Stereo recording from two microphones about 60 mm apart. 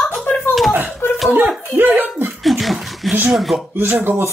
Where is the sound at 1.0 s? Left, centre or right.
Left.